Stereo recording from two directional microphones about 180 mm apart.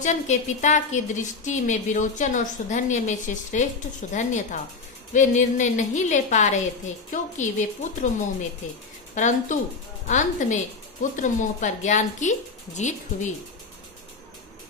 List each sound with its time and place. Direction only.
0.0 s a woman's voice: 40° left (ahead or behind)
9.1 s a woman's voice: 45° left (ahead or behind)